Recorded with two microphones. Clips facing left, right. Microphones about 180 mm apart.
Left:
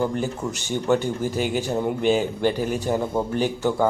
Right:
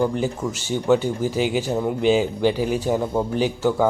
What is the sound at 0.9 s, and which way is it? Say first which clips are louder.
Speech: right 3 dB; 10° right (ahead or behind).